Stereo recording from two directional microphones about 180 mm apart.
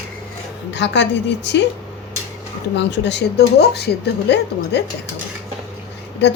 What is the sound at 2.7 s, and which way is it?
Speech, 75° left (ahead or behind).